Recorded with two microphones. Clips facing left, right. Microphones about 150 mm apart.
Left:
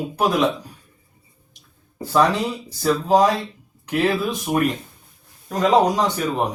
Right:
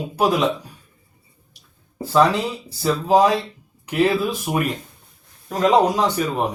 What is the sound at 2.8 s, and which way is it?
Speech, 5° right (ahead or behind).